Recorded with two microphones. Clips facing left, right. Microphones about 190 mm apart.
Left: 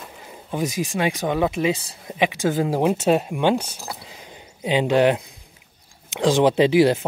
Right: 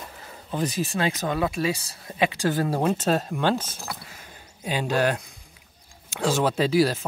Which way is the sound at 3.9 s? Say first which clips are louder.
Left 4 dB; 15° left (ahead or behind).